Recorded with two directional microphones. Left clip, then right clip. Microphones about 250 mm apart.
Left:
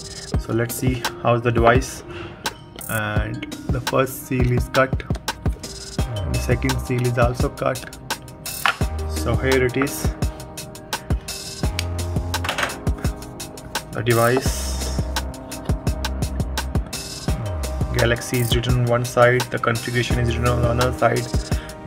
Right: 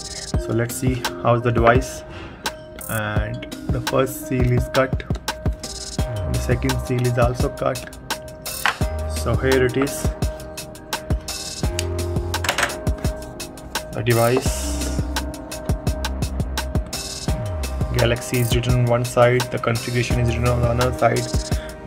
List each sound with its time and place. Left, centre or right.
0.3 s speech: centre
8.7 s music: centre
13.7 s music: centre
17.9 s speech: centre